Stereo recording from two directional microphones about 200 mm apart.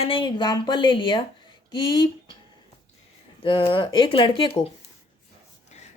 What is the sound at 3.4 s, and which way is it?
Speech, 25° left (ahead or behind).